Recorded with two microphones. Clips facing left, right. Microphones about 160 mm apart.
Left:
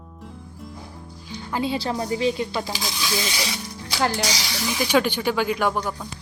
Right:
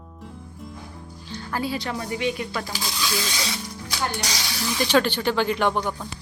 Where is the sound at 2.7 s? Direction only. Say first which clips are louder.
Left 1 dB; 15° left (ahead or behind).